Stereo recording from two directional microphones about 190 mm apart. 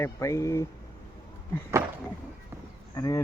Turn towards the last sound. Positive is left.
turn(degrees=15)  # may be behind; listen again after turning